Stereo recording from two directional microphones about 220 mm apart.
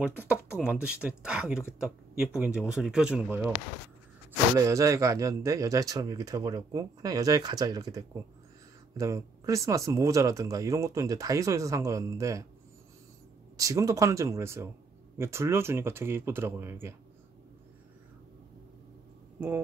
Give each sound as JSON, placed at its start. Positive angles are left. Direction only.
{"t": 0.0, "sound": "speech", "side_deg": -5}
{"t": 4.6, "sound": "speech", "side_deg": -15}
{"t": 13.6, "sound": "speech", "side_deg": -15}
{"t": 19.4, "sound": "speech", "side_deg": -10}